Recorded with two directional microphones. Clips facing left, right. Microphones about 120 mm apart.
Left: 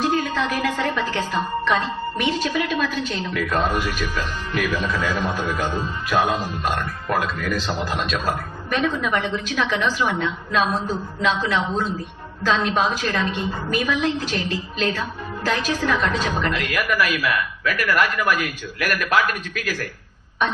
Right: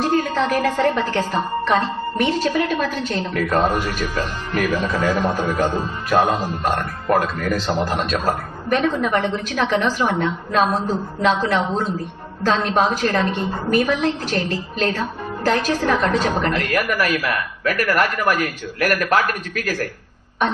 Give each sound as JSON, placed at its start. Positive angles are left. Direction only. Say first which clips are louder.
{"t": 0.0, "sound": "a woman's voice", "louder": "right 3 dB", "side_deg": -40}